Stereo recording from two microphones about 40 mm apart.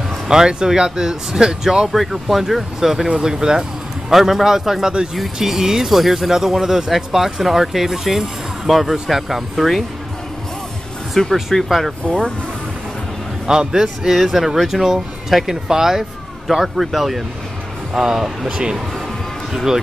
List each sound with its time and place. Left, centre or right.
0.3 s speech: centre
1.9 s speech: centre
11.2 s speech: centre
13.5 s speech: centre
19.5 s speech: centre